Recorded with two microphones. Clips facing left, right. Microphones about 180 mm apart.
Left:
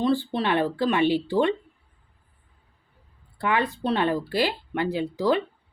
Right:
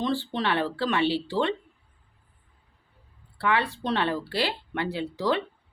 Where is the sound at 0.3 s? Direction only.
15° left (ahead or behind).